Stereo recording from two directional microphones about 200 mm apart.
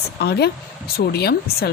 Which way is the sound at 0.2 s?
55° left (ahead or behind).